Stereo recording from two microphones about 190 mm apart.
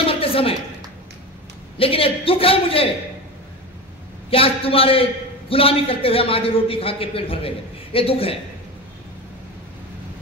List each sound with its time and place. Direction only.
0.0 s a sound: 30° left (ahead or behind)
1.8 s a man's voice: 30° left (ahead or behind)
4.3 s a man's voice: 30° left (ahead or behind)